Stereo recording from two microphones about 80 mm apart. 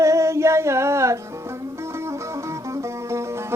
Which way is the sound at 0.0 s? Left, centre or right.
Right.